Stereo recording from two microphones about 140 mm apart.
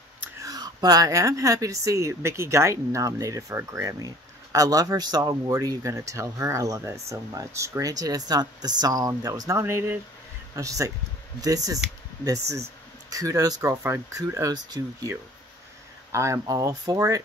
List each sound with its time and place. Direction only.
0.4 s a man's voice: 25° right (ahead or behind)